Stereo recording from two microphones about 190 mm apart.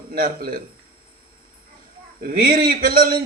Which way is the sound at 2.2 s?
50° right (ahead or behind).